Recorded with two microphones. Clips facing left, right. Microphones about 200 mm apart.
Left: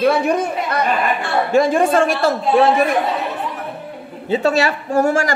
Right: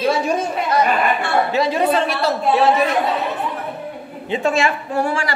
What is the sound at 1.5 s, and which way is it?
A woman's voice, 50° left (ahead or behind).